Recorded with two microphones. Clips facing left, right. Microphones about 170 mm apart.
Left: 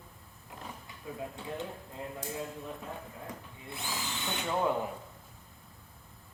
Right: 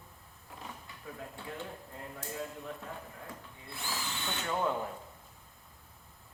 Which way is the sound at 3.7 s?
20° left (ahead or behind).